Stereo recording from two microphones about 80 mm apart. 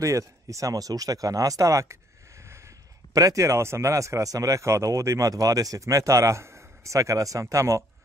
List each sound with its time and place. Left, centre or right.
0.0 s speech: right